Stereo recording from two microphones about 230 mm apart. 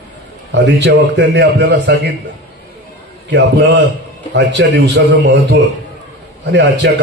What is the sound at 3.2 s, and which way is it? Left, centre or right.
A man's voice, right.